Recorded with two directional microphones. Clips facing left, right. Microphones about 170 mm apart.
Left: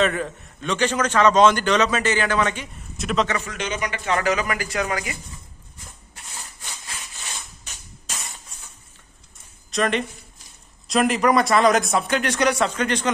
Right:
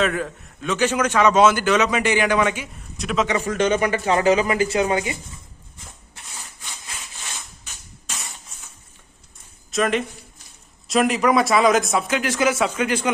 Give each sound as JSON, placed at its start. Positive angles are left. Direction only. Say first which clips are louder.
{"t": 0.0, "sound": "a man's voice", "louder": "even", "side_deg": 0}
{"t": 3.0, "sound": "speech", "louder": "even", "side_deg": 0}
{"t": 3.4, "sound": "a man's voice", "louder": "right 9 dB", "side_deg": -50}
{"t": 4.0, "sound": "speech", "louder": "right 2 dB", "side_deg": -30}
{"t": 9.7, "sound": "speech", "louder": "right 1 dB", "side_deg": 0}